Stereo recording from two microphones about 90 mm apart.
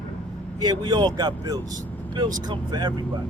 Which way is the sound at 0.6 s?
50° right (ahead or behind).